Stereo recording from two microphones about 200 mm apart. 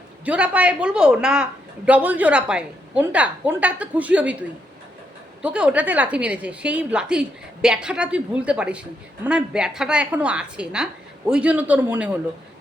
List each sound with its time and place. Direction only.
0.3 s a woman's voice: 5° right (ahead or behind)